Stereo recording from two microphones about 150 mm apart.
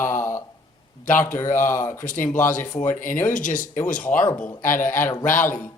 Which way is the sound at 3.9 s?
10° left (ahead or behind).